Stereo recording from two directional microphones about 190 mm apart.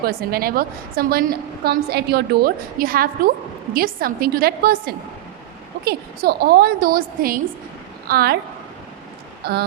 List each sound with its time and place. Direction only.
0.0 s a woman's voice: 50° right (ahead or behind)
9.4 s speech: 55° right (ahead or behind)